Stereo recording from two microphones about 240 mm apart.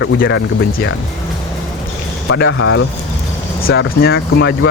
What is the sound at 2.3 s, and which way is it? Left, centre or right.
Speech, left.